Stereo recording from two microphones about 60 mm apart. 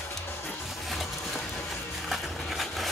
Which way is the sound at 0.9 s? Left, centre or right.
Centre.